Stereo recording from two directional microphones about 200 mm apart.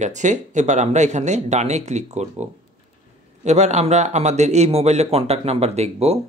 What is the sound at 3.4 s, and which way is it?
Speech, 35° right (ahead or behind).